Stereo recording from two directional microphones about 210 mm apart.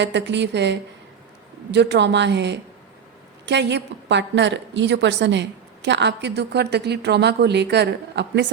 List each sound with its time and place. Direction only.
0.0 s a woman's voice: 55° right (ahead or behind)